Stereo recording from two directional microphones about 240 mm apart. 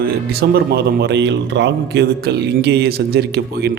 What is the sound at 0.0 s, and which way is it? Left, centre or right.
A man's voice, right.